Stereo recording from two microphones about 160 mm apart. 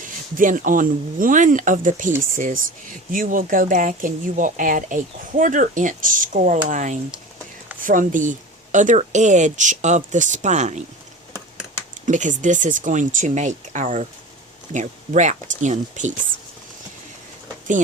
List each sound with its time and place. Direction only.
0.0 s speech: 55° right (ahead or behind)
12.0 s speech: 50° right (ahead or behind)